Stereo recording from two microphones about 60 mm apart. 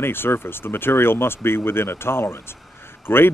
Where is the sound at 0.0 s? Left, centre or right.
Left.